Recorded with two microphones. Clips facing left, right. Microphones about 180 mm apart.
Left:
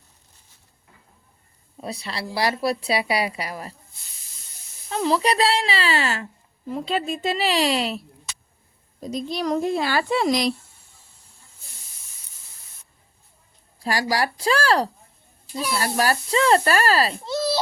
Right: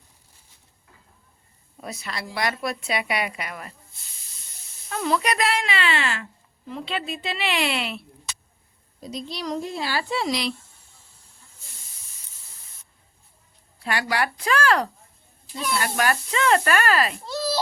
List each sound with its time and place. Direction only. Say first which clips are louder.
1.8 s a woman's voice: left 3 dB; 30° left (ahead or behind)
4.9 s a woman's voice: left 3 dB; 30° left (ahead or behind)
9.0 s speech: left 6 dB; 50° left (ahead or behind)
13.8 s a woman's voice: left 2 dB; 35° left (ahead or behind)
17.2 s a sound: left 3 dB; centre (ahead or behind)